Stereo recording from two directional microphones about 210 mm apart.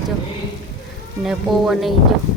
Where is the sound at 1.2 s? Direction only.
Centre (ahead or behind).